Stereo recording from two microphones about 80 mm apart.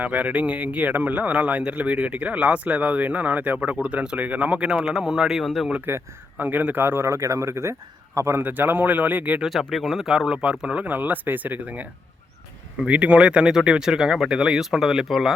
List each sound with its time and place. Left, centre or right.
0.0 s speech: centre
5.8 s a man's voice: right
9.4 s speech: centre